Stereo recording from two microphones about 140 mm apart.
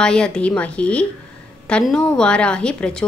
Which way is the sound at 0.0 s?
5° left (ahead or behind).